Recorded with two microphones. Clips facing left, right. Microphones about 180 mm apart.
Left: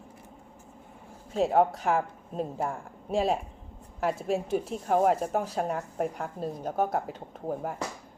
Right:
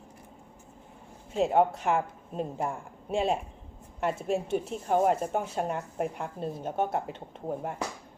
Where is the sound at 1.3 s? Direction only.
Centre (ahead or behind).